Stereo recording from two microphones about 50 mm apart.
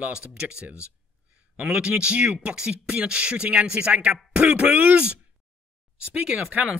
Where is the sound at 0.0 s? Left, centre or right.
Centre.